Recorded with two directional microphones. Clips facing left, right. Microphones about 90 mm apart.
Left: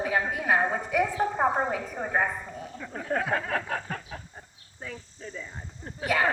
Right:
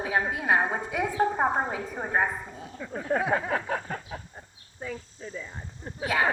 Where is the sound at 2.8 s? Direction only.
5° right (ahead or behind).